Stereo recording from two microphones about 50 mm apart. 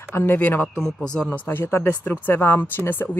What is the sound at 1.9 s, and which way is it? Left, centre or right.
Speech, left.